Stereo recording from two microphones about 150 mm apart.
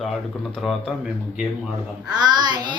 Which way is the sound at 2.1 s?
30° right (ahead or behind).